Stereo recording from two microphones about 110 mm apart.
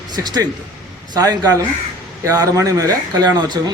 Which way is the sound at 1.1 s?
35° right (ahead or behind).